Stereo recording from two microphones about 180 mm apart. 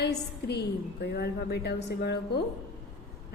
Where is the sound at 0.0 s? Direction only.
65° left (ahead or behind).